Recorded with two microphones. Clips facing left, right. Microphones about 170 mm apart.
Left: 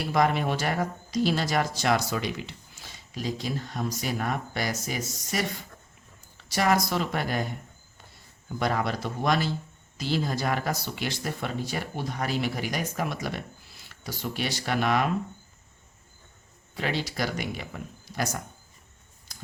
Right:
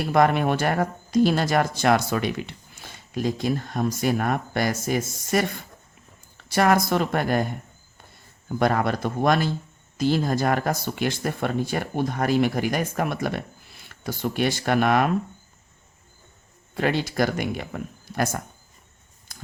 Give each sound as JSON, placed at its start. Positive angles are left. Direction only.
{"t": 0.1, "sound": "speech", "side_deg": -55}
{"t": 8.5, "sound": "speech", "side_deg": -55}
{"t": 16.7, "sound": "speech", "side_deg": -50}
{"t": 19.3, "sound": "a sound", "side_deg": -55}